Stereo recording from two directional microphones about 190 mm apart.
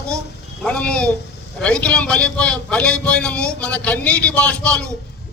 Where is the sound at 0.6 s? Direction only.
5° left (ahead or behind).